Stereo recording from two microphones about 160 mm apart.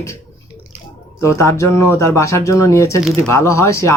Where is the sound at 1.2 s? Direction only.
20° left (ahead or behind).